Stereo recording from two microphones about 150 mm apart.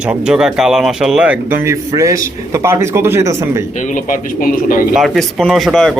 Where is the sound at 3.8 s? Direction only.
60° left (ahead or behind).